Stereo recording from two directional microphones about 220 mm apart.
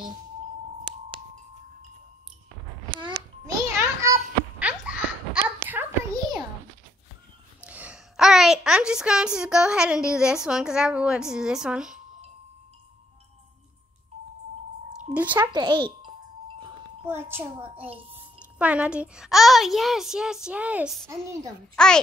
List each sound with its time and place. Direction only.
3.0 s a sound: 15° right (ahead or behind)
7.6 s a woman's voice: 5° right (ahead or behind)
15.1 s a child's voice: 10° right (ahead or behind)
17.0 s a child's voice: 10° right (ahead or behind)